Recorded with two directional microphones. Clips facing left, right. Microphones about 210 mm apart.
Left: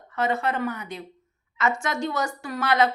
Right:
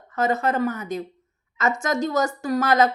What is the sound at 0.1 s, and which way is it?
A woman's voice, 40° right (ahead or behind).